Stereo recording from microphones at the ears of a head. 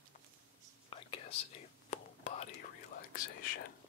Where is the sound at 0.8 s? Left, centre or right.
Left.